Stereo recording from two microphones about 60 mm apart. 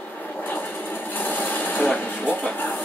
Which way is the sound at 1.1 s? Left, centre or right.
Left.